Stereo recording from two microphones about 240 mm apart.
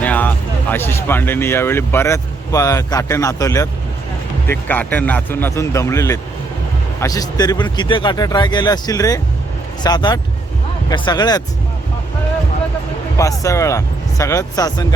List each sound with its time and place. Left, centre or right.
0.0 s speech: centre
13.4 s speech: centre